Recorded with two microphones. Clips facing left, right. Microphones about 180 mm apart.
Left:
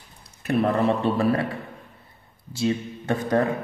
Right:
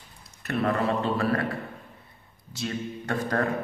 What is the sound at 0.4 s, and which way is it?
Speech, 20° left (ahead or behind).